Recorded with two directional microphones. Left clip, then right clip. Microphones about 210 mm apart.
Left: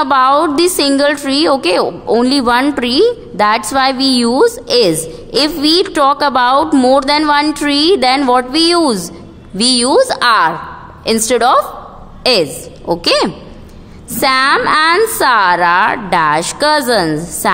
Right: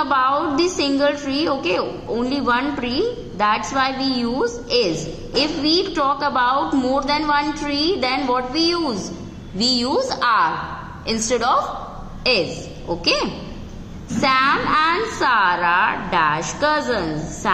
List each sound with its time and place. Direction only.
0.0 s a woman's voice: 50° left (ahead or behind)